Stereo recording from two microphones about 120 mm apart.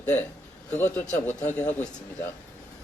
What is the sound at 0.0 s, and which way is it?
A man's voice, 10° left (ahead or behind).